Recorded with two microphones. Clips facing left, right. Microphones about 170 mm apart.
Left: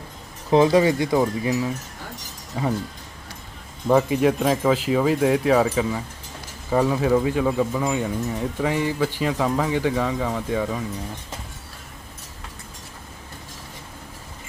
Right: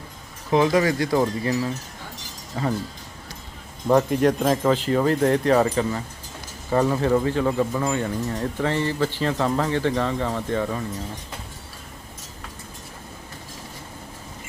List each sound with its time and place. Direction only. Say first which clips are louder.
0.5 s speech: left 3 dB; 25° left (ahead or behind)
3.8 s speech: even; 5° left (ahead or behind)